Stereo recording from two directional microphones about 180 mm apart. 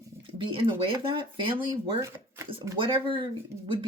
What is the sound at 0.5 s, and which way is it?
Speech, 30° right (ahead or behind).